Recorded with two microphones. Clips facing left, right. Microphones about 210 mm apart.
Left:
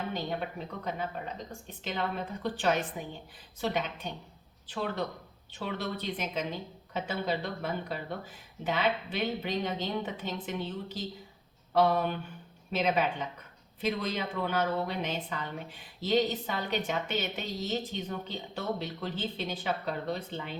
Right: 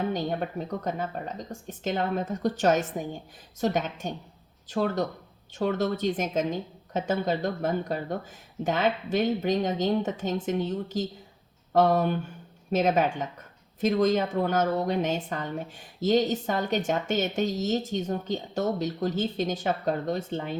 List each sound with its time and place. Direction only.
0.1 s a woman's voice: 45° right (ahead or behind)